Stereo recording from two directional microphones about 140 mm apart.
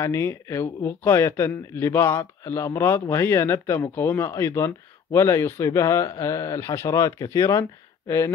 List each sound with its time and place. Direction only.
0.0 s a man's voice: 20° left (ahead or behind)